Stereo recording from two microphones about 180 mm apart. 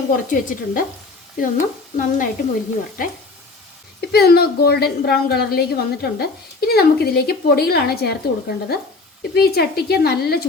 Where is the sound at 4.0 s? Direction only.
60° left (ahead or behind).